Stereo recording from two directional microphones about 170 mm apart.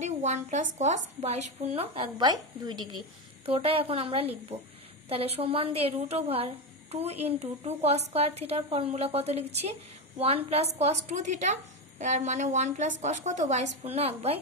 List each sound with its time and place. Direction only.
0.0 s a woman's voice: 45° right (ahead or behind)